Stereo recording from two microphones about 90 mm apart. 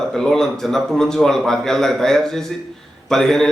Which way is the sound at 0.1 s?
5° left (ahead or behind).